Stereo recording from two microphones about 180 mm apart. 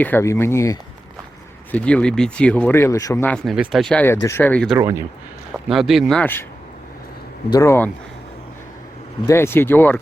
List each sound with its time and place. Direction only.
0.0 s speech: 15° left (ahead or behind)
4.8 s speech: 15° right (ahead or behind)
5.6 s speech: centre (ahead or behind)
7.5 s speech: 15° left (ahead or behind)
9.2 s speech: 15° left (ahead or behind)